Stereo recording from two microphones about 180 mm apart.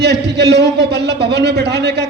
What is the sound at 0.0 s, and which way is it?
A man's voice, 70° right (ahead or behind).